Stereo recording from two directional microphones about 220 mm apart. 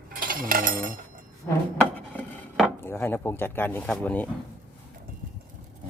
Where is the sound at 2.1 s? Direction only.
5° left (ahead or behind).